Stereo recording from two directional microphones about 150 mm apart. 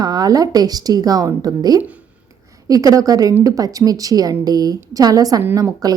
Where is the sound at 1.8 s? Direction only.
10° right (ahead or behind).